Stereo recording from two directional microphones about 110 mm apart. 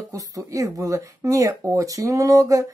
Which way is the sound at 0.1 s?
30° right (ahead or behind).